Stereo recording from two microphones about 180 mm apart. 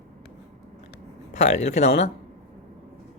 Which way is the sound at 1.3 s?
40° left (ahead or behind).